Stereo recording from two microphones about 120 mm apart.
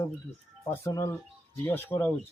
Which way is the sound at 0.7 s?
25° left (ahead or behind).